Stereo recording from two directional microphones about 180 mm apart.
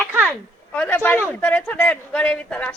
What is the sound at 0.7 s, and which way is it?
A man's voice, 10° left (ahead or behind).